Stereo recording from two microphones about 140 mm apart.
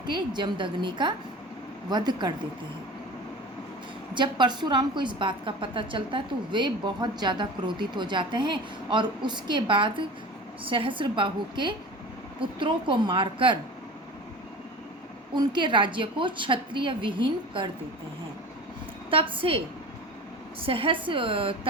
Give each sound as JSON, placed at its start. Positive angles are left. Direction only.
{"t": 0.0, "sound": "a woman's voice", "side_deg": -30}
{"t": 4.1, "sound": "a woman's voice", "side_deg": -35}
{"t": 15.3, "sound": "a woman's voice", "side_deg": -35}
{"t": 19.1, "sound": "a woman's voice", "side_deg": -40}